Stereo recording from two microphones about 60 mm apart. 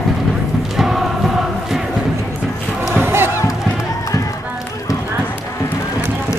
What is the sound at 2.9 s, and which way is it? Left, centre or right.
Crowd, right.